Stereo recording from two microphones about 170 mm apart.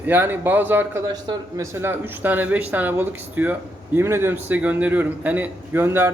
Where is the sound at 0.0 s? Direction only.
10° right (ahead or behind).